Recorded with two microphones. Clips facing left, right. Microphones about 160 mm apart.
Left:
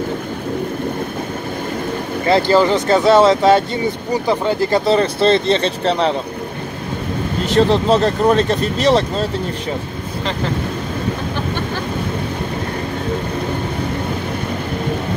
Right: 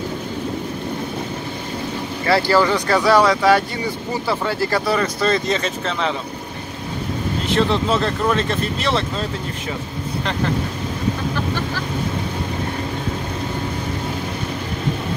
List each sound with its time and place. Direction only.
2.2 s speech: 20° left (ahead or behind); by 6.1 s 35° left (ahead or behind)
7.5 s speech: 40° left (ahead or behind)